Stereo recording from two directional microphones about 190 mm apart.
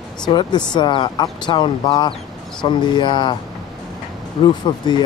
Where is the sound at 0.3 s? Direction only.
20° left (ahead or behind).